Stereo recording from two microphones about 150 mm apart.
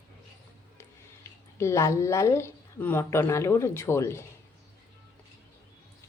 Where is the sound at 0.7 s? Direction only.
20° left (ahead or behind).